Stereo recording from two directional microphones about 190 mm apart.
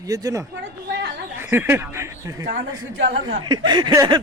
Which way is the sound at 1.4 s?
10° right (ahead or behind).